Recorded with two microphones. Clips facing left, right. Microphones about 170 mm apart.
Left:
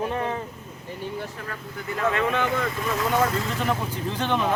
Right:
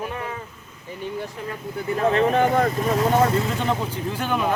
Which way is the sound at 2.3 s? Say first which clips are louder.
Right 6 dB; 45° right (ahead or behind).